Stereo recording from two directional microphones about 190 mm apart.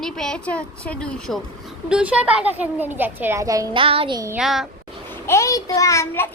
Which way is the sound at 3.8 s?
30° right (ahead or behind).